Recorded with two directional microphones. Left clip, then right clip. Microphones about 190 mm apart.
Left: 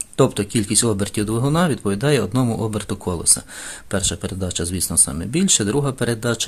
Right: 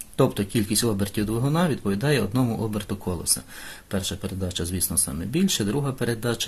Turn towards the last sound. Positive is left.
turn(degrees=25)  # may be behind; listen again after turning